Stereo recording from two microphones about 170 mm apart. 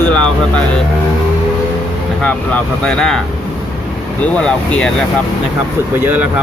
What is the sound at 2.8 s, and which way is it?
Speech, 5° left (ahead or behind).